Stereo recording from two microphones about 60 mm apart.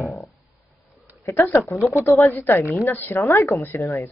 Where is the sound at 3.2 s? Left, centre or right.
Left.